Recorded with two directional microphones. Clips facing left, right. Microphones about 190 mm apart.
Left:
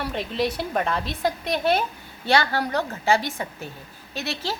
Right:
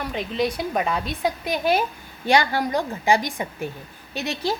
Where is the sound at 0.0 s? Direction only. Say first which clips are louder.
Right 1 dB; centre (ahead or behind).